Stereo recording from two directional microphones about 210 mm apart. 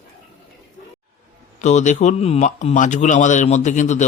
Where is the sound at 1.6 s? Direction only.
35° left (ahead or behind).